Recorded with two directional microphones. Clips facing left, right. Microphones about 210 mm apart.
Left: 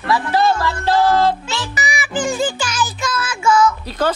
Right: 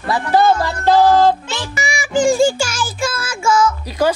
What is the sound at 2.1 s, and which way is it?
A child's voice, 10° right (ahead or behind).